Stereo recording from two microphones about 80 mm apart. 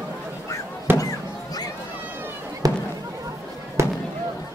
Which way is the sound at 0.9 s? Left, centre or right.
Right.